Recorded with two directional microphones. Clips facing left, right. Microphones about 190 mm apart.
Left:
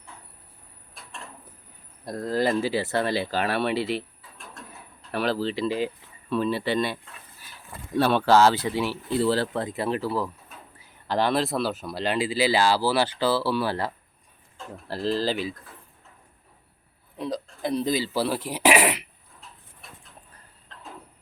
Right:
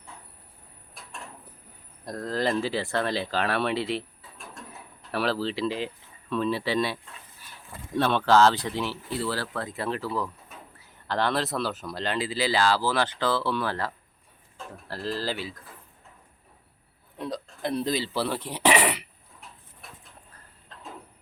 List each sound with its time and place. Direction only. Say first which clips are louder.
2.0 s speech: left 3 dB; 5° left (ahead or behind)
5.1 s speech: left 1 dB; centre (ahead or behind)
9.1 s speech: left 8 dB; 25° left (ahead or behind)
17.2 s speech: left 3 dB; centre (ahead or behind)